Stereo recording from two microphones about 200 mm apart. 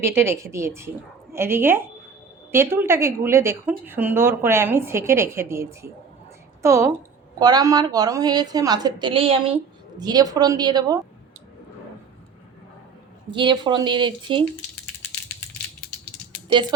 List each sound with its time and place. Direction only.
0.0 s a woman's voice: 10° right (ahead or behind)
13.3 s a woman's voice: 25° right (ahead or behind)